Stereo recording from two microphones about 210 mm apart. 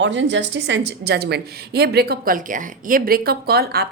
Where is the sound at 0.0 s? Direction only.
60° right (ahead or behind).